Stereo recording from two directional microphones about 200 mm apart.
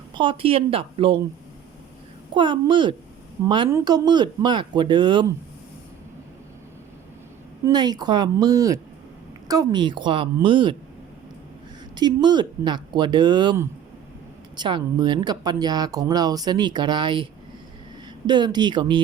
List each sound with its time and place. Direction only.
0.1 s speech: 25° right (ahead or behind)
2.3 s speech: 25° right (ahead or behind)
7.6 s speech: 20° right (ahead or behind)
11.9 s speech: 20° right (ahead or behind)
18.3 s speech: 20° right (ahead or behind)